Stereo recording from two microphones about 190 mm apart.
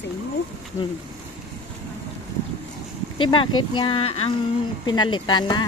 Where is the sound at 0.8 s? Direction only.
15° left (ahead or behind).